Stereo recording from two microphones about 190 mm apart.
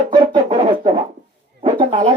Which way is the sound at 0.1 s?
30° right (ahead or behind).